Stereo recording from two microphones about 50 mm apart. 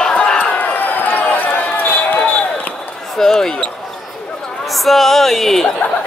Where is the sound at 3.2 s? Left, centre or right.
Centre.